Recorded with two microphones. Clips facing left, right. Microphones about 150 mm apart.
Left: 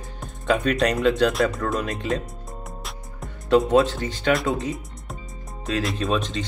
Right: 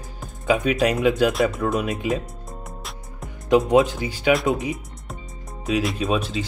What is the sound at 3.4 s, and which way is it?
Speech, 15° right (ahead or behind).